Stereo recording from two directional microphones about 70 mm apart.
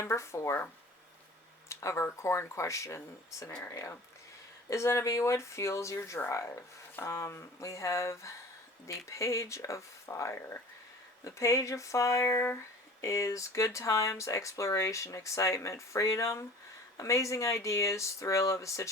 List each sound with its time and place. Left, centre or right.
0.0 s speech: left
1.7 s speech: left
4.7 s speech: left
12.2 s speech: left
13.0 s speech: left